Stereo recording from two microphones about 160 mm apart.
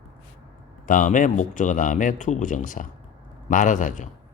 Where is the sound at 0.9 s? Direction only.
55° left (ahead or behind).